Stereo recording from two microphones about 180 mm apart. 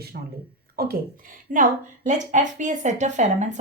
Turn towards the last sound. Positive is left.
turn(degrees=-40)  # may be behind; listen again after turning